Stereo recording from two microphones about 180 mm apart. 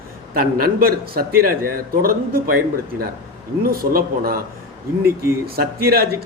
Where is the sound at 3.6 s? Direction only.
55° right (ahead or behind).